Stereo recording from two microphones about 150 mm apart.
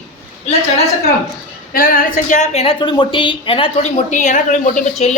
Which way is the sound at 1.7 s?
75° left (ahead or behind).